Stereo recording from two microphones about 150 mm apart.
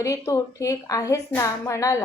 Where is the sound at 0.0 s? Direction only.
20° left (ahead or behind).